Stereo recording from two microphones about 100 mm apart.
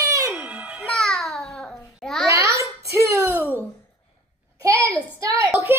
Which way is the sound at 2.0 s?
5° left (ahead or behind).